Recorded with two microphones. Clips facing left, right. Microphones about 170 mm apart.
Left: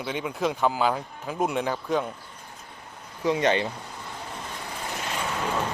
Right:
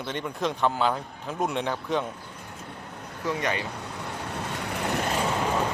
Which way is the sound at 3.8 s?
70° right (ahead or behind).